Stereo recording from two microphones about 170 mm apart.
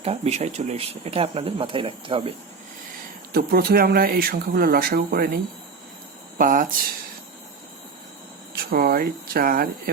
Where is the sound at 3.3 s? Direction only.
65° right (ahead or behind).